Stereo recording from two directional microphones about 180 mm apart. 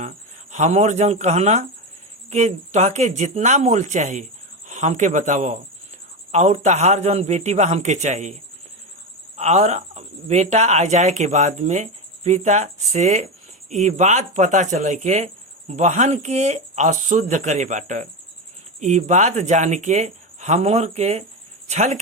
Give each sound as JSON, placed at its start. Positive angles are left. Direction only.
{"t": 0.5, "sound": "speech", "side_deg": -40}